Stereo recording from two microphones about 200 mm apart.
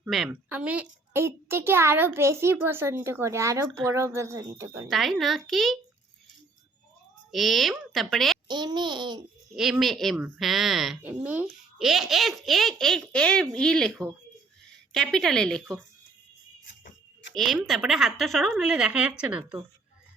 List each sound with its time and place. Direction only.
0.1 s a child's voice: 5° right (ahead or behind)
4.9 s speech: centre (ahead or behind)
7.3 s speech: centre (ahead or behind)
8.4 s a child's voice: 20° right (ahead or behind)
9.6 s speech: centre (ahead or behind)
14.9 s speech: centre (ahead or behind)
17.3 s speech: centre (ahead or behind)